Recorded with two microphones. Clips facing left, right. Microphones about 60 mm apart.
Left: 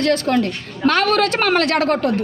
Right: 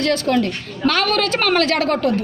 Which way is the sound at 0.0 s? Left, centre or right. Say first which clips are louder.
Left 1 dB; left.